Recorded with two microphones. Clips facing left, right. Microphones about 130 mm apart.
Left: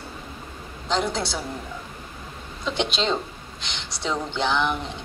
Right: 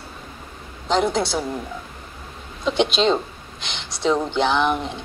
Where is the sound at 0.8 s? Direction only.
20° right (ahead or behind).